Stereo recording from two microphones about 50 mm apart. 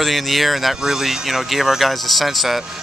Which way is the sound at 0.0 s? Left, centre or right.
Centre.